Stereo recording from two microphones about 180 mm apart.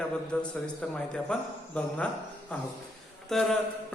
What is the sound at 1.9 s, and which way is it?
Speech, 5° left (ahead or behind).